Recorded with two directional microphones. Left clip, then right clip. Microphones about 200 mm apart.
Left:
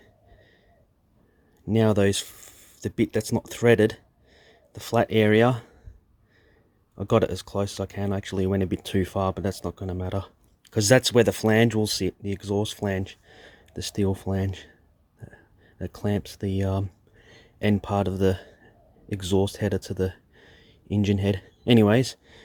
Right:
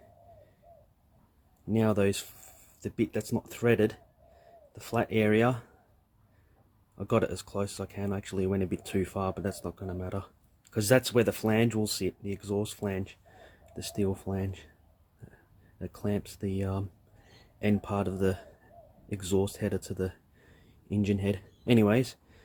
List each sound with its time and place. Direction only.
1.7 s speech: 45° left (ahead or behind)
6.9 s speech: 40° left (ahead or behind)
15.8 s speech: 45° left (ahead or behind)